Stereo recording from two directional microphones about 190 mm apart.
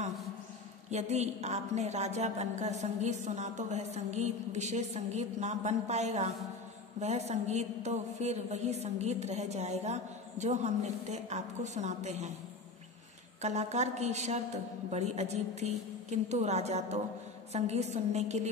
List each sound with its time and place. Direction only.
0.8 s a woman's voice: 35° right (ahead or behind)
13.4 s a woman's voice: 35° right (ahead or behind)